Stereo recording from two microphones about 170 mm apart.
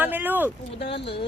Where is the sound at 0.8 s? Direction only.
35° left (ahead or behind).